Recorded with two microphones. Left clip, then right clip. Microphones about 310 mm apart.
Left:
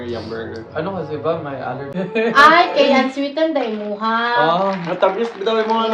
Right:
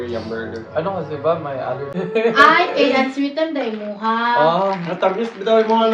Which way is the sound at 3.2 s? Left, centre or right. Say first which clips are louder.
Left 2 dB; centre.